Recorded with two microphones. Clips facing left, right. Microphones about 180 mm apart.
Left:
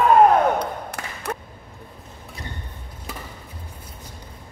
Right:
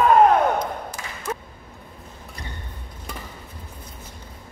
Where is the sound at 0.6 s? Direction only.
65° left (ahead or behind).